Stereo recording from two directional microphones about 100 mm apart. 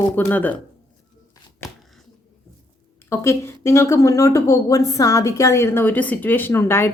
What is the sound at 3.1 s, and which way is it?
Speech, 25° left (ahead or behind).